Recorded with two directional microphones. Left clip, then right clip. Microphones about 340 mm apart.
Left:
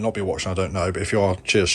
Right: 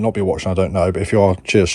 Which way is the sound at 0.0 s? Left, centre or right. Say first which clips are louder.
Right 6 dB; centre.